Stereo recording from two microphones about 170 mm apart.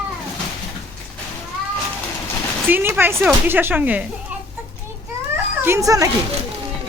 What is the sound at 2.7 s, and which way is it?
Speech, 15° right (ahead or behind).